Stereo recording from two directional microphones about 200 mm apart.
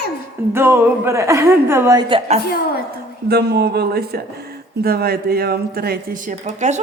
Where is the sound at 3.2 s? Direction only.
55° right (ahead or behind).